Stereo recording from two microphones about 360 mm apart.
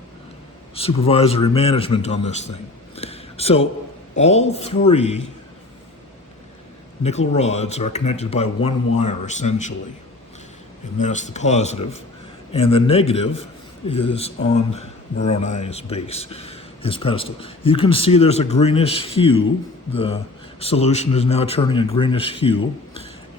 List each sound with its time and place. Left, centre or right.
0.8 s speech: centre
2.9 s a sound: centre
4.2 s speech: centre
7.0 s a man's voice: centre
10.9 s a man's voice: centre
20.6 s speech: centre